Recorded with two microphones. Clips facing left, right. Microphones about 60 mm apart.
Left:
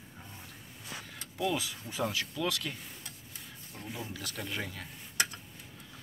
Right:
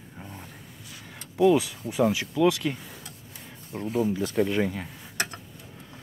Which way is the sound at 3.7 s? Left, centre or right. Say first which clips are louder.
Right 14 dB; right.